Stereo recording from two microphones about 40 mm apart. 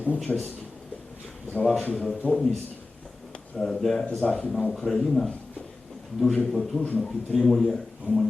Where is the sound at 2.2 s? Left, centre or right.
Left.